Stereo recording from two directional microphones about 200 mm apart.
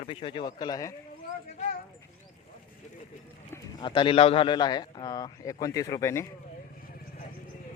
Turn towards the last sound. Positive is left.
turn(degrees=15)  # may be behind; listen again after turning